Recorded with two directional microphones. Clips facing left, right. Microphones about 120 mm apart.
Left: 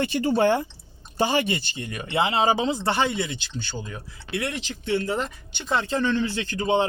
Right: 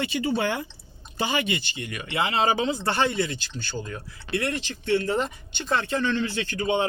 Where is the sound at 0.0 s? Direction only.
45° left (ahead or behind); by 5.8 s 15° left (ahead or behind).